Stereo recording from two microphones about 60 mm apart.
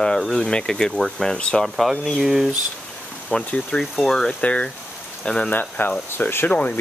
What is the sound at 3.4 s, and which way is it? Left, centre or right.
Speech, left.